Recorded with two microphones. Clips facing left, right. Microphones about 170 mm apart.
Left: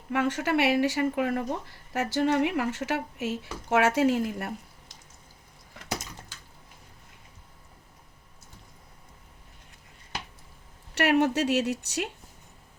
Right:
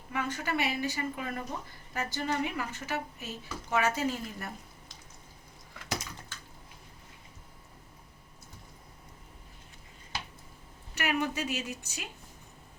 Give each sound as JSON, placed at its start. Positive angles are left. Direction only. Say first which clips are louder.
{"t": 0.1, "sound": "speech", "louder": "left 7 dB", "side_deg": 80}
{"t": 10.9, "sound": "speech", "louder": "left 8 dB", "side_deg": 75}